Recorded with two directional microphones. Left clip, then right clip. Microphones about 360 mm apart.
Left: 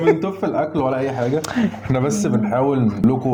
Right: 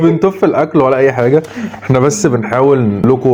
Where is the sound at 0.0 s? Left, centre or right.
Right.